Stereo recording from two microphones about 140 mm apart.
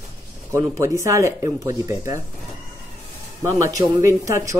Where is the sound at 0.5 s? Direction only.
20° right (ahead or behind).